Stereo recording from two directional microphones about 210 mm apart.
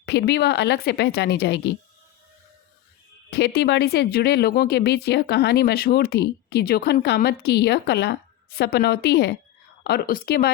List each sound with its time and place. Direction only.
0.0 s speech: 50° left (ahead or behind)
3.2 s speech: 50° left (ahead or behind)